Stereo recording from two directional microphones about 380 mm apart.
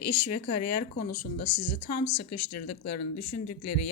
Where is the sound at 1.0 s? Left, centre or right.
Left.